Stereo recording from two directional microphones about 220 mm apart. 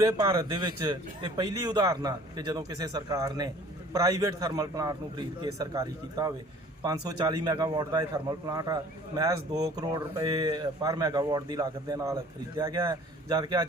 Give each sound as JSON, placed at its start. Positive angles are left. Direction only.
{"t": 0.0, "sound": "a man's voice", "side_deg": -15}